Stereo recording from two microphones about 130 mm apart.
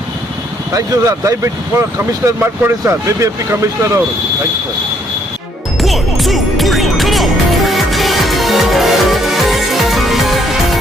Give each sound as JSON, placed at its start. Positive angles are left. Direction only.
{"t": 0.7, "sound": "speech", "side_deg": -25}
{"t": 5.8, "sound": "music", "side_deg": 0}